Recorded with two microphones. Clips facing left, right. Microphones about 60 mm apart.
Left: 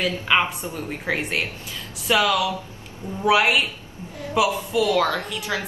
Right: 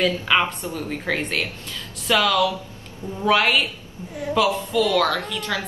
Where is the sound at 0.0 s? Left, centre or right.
Centre.